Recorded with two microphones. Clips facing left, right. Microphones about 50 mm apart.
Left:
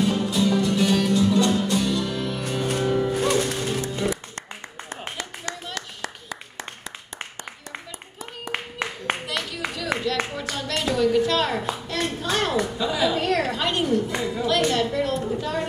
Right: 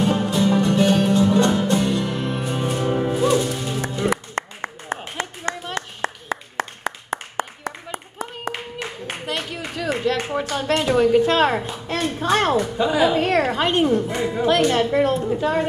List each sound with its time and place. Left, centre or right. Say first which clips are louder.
0.0 s music: right 3 dB; right
3.3 s music: right 2 dB; left
3.8 s music: right 3 dB; right
4.4 s clapping: right 8 dB; right
6.5 s a sound: right 10 dB; right
8.5 s clapping: left 2 dB; left
9.2 s a sound: right 1 dB; right